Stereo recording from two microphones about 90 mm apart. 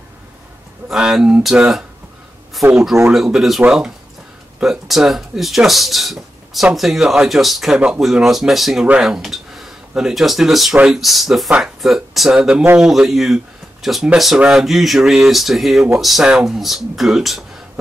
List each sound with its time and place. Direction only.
0.8 s speech: 5° right (ahead or behind)
3.1 s speech: 5° right (ahead or behind)
7.7 s speech: 15° right (ahead or behind)
8.0 s speech: 5° right (ahead or behind)